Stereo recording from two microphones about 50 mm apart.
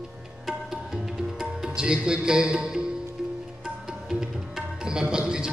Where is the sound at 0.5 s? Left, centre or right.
Centre.